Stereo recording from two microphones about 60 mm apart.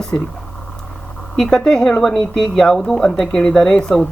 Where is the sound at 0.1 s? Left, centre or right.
Left.